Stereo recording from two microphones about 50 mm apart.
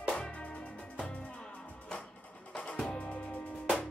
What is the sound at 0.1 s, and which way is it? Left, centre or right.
Music, left.